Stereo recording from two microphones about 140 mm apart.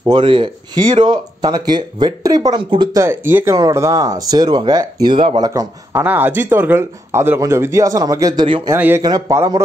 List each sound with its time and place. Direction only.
0.1 s speech: 35° right (ahead or behind)
5.5 s speech: 20° right (ahead or behind); by 8.6 s 35° right (ahead or behind)
8.7 s speech: 15° right (ahead or behind)
9.0 s speech: 25° right (ahead or behind)